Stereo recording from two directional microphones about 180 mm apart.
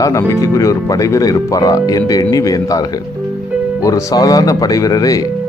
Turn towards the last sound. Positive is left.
turn(degrees=20)  # may be behind; listen again after turning